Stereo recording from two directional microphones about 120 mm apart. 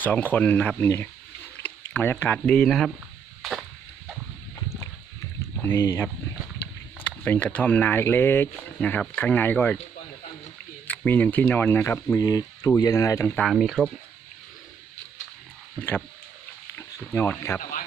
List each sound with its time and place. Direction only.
0.0 s speech: 15° left (ahead or behind)
1.6 s a sound: 15° left (ahead or behind)
2.4 s speech: 5° left (ahead or behind)
5.6 s speech: 20° left (ahead or behind)
7.0 s speech: 15° left (ahead or behind)
10.9 s speech: 15° left (ahead or behind)
13.4 s speech: centre (ahead or behind)
16.7 s speech: 20° left (ahead or behind)